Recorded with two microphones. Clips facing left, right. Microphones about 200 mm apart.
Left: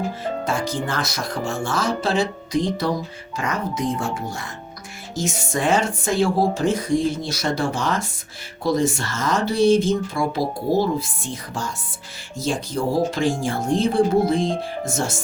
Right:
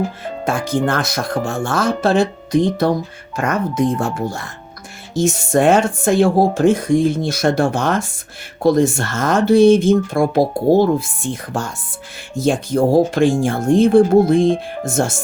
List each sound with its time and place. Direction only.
0.4 s speech: 50° right (ahead or behind)
12.4 s speech: 55° right (ahead or behind)